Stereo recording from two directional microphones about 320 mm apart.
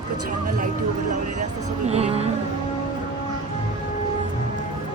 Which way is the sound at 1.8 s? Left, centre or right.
Centre.